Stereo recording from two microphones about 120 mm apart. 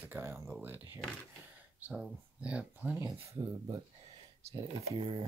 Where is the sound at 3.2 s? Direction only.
25° right (ahead or behind).